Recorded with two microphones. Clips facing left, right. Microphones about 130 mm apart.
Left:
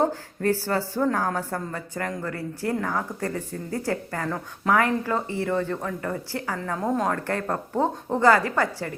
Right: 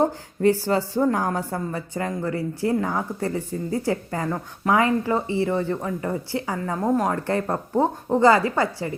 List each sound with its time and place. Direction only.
0.0 s a woman's voice: 15° right (ahead or behind)